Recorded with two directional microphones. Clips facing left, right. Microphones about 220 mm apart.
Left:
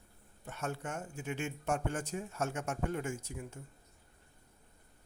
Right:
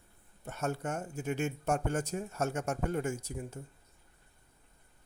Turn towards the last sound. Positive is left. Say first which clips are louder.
# right 4 dB
turn(degrees=-35)  # may be behind; listen again after turning